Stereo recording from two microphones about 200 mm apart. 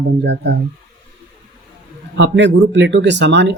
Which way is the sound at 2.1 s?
65° right (ahead or behind).